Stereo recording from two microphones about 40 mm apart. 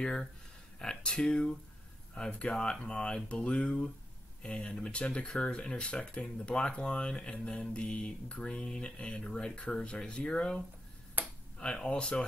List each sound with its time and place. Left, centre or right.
0.0 s speech: centre
2.5 s speech: left
11.2 s a sound: right
11.6 s speech: left